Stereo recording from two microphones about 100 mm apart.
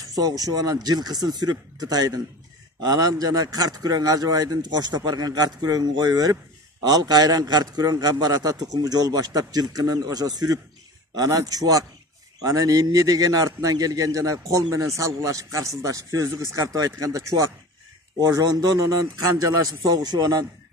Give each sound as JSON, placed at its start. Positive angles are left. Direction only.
{"t": 0.1, "sound": "a man's voice", "side_deg": -40}